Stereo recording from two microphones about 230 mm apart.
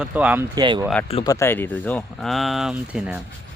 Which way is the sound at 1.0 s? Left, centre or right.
Left.